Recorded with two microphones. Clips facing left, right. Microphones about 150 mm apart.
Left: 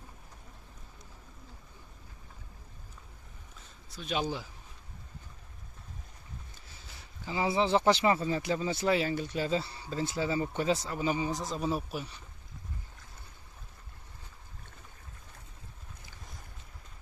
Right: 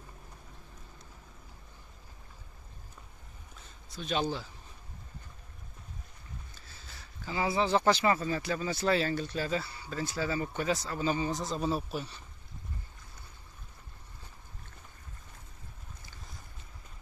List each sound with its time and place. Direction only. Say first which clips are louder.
3.9 s speech: right 1 dB; 5° left (ahead or behind)
6.9 s speech: left 1 dB; 20° left (ahead or behind)